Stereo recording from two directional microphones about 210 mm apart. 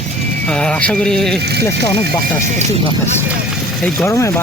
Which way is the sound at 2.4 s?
30° right (ahead or behind).